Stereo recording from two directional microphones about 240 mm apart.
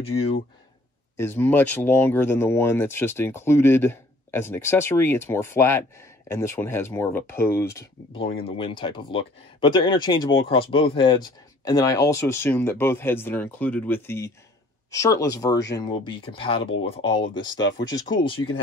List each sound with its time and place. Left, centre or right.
1.1 s speech: centre